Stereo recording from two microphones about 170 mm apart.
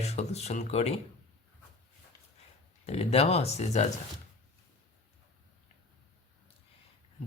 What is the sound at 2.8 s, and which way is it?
Speech, 35° left (ahead or behind).